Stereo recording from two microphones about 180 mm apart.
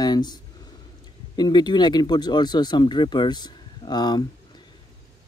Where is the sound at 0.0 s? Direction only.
25° left (ahead or behind).